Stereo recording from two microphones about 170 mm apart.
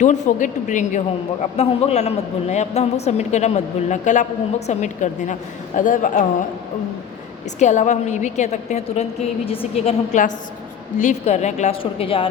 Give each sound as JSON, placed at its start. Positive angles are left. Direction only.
{"t": 0.0, "sound": "a man's voice", "side_deg": 45}
{"t": 7.6, "sound": "a man's voice", "side_deg": 45}